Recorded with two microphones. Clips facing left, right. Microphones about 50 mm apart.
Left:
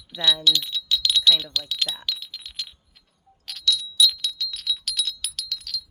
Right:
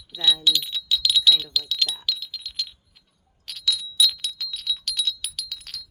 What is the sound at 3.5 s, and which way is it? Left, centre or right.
Wind chime, centre.